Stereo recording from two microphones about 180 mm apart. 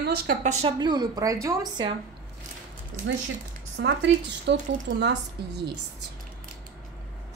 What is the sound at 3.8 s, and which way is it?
A woman's voice, 75° right (ahead or behind).